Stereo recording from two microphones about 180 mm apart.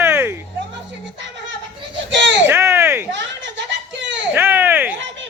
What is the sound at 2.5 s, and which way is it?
Speech, 15° right (ahead or behind).